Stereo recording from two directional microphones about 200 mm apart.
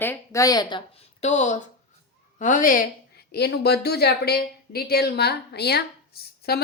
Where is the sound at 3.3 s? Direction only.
55° left (ahead or behind).